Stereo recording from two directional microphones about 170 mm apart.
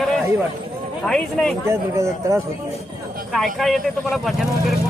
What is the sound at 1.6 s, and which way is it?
Speech, 15° right (ahead or behind).